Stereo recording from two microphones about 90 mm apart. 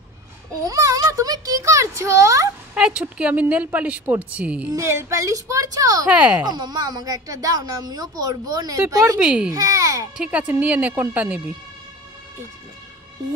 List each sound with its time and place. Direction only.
0.7 s a child's voice: 40° right (ahead or behind)
2.7 s speech: 10° right (ahead or behind)
4.7 s a child's voice: 30° right (ahead or behind)
6.0 s speech: 15° right (ahead or behind)
6.4 s a woman's voice: 50° right (ahead or behind)
9.2 s speech: 15° right (ahead or behind)
9.5 s a child's voice: 35° right (ahead or behind)
10.1 s speech: 10° right (ahead or behind)